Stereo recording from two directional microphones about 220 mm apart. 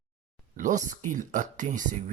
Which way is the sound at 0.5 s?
35° right (ahead or behind).